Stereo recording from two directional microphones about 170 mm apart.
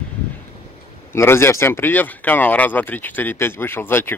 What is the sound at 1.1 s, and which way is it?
Speech, 15° left (ahead or behind).